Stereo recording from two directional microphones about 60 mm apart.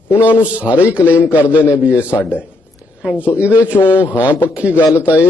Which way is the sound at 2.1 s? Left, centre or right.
Left.